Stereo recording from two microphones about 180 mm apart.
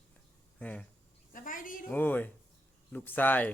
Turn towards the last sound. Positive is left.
turn(degrees=10)  # may be behind; listen again after turning